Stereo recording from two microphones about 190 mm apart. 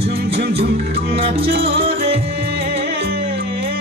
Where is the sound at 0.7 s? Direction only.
60° right (ahead or behind).